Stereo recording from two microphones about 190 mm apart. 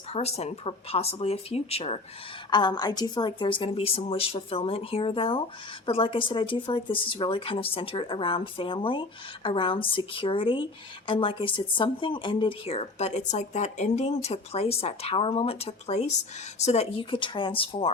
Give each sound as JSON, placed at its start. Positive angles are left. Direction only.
{"t": 0.1, "sound": "speech", "side_deg": 35}